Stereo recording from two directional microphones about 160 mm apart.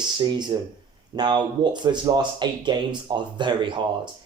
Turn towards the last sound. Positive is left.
turn(degrees=-30)  # may be behind; listen again after turning